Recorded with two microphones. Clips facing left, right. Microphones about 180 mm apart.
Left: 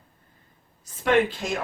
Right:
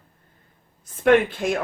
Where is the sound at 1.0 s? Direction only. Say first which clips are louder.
Right 4 dB; 55° right (ahead or behind).